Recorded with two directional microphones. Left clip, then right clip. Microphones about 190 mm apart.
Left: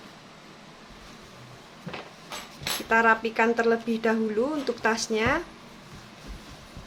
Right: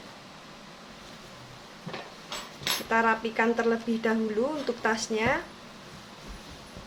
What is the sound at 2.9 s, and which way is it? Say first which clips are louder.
Speech: left 5 dB; 25° left (ahead or behind).